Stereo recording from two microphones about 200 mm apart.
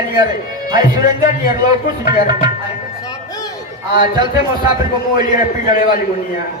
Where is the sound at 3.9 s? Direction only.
20° right (ahead or behind).